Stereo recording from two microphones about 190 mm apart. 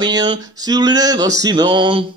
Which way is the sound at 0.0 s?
20° right (ahead or behind).